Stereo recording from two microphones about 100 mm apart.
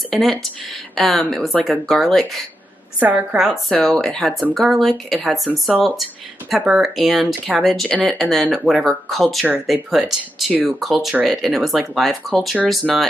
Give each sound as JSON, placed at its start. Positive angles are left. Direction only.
{"t": 0.1, "sound": "speech", "side_deg": 0}
{"t": 3.0, "sound": "a woman's voice", "side_deg": -15}
{"t": 3.3, "sound": "speech", "side_deg": -5}